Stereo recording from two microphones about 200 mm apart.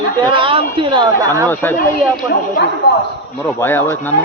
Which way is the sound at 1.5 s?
10° left (ahead or behind).